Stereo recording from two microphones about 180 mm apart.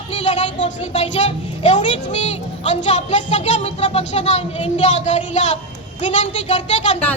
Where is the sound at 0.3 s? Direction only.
40° left (ahead or behind).